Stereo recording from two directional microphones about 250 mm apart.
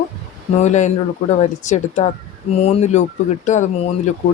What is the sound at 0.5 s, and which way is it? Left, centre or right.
Speech, left.